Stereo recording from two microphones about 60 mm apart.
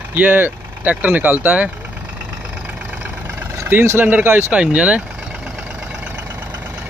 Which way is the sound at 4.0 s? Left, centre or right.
Right.